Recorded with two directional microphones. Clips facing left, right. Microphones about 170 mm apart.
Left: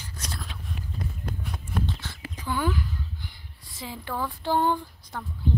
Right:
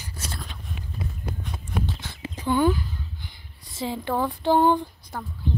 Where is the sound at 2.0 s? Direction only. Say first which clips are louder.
Right 3 dB; 25° right (ahead or behind).